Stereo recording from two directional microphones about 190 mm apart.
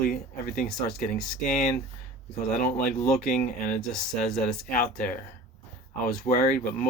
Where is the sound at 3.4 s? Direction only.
40° left (ahead or behind).